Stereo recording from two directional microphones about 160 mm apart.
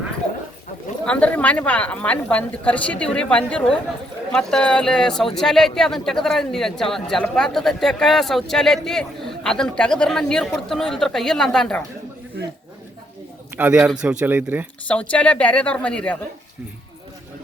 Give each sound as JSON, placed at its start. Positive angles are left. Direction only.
{"t": 1.0, "sound": "a woman's voice", "side_deg": 10}
{"t": 13.6, "sound": "speech", "side_deg": -5}
{"t": 14.8, "sound": "a woman's voice", "side_deg": 10}